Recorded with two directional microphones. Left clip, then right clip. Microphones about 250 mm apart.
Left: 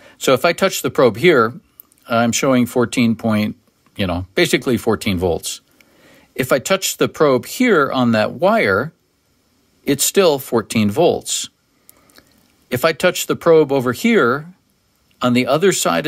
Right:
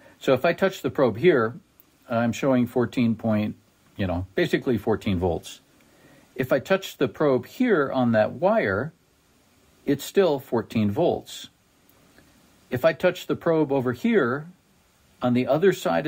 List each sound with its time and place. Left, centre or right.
0.0 s speech: left
12.6 s speech: left